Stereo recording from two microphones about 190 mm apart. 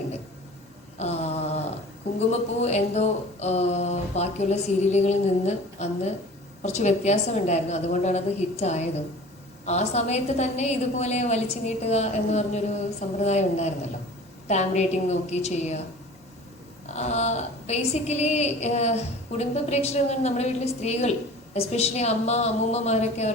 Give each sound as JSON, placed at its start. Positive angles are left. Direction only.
{"t": 0.9, "sound": "mantra", "side_deg": 35}
{"t": 2.1, "sound": "a woman's voice", "side_deg": 35}
{"t": 16.9, "sound": "a woman's voice", "side_deg": 35}